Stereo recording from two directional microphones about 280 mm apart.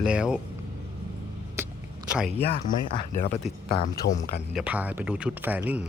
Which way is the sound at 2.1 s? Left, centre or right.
Centre.